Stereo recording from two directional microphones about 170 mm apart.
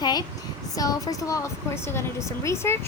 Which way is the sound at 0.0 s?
25° left (ahead or behind).